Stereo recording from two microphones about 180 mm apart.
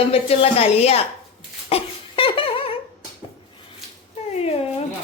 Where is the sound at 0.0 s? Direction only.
35° left (ahead or behind).